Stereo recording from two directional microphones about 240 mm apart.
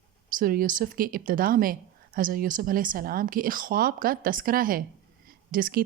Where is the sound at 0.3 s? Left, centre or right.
Right.